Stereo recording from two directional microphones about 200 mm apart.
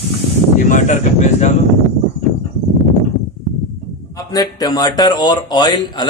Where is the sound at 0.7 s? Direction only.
40° left (ahead or behind).